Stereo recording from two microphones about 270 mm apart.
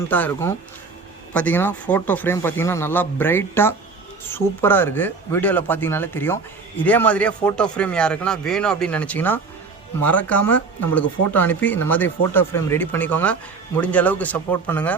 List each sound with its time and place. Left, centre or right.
0.1 s speech: centre